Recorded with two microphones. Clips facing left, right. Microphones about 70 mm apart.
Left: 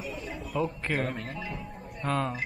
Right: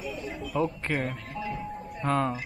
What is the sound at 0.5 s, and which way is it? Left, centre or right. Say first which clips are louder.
Speech: right 2 dB; centre.